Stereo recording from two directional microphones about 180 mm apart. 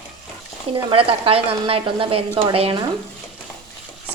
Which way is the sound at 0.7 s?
30° right (ahead or behind).